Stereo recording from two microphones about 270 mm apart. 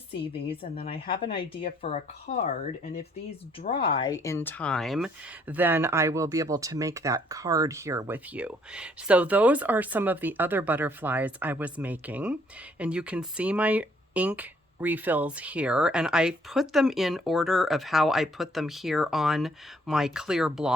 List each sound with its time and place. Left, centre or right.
0.4 s speech: centre
3.6 s speech: left; by 20.7 s centre